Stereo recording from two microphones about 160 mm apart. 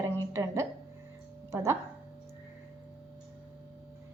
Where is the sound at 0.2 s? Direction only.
20° right (ahead or behind).